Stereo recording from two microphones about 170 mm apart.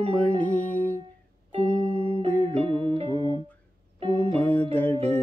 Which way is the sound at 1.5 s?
35° right (ahead or behind).